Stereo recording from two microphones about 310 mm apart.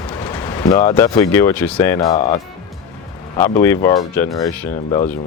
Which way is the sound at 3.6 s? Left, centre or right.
Centre.